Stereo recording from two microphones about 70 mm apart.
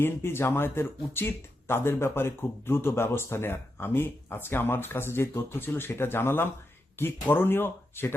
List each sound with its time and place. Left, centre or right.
0.0 s speech: left